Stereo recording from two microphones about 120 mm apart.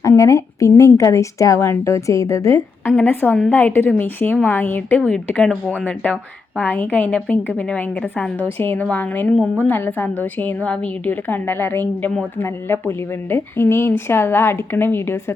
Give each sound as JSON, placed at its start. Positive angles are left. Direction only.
{"t": 0.0, "sound": "a woman's voice", "side_deg": 25}
{"t": 2.9, "sound": "a woman's voice", "side_deg": 15}